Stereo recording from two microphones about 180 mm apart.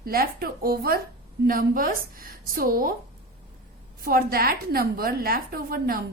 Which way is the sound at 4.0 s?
55° right (ahead or behind).